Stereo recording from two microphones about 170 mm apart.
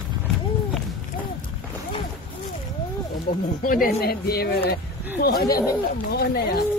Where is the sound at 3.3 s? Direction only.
60° left (ahead or behind).